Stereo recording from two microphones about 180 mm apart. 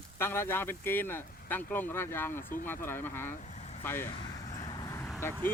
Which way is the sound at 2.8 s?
10° left (ahead or behind).